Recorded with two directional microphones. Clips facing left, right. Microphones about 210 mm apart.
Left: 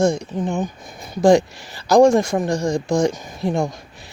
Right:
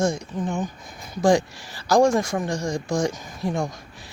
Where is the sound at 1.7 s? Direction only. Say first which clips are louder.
Left 5 dB; 20° left (ahead or behind).